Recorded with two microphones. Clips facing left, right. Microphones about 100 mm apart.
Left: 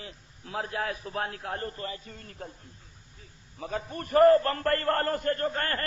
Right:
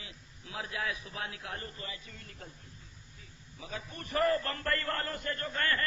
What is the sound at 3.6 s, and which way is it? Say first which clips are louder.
A man's voice: left 9 dB; 45° left (ahead or behind).